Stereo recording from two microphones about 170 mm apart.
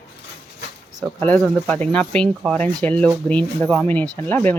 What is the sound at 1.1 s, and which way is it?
Speech, 10° left (ahead or behind).